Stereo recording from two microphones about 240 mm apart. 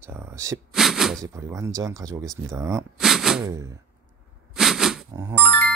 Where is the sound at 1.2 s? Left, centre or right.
Centre.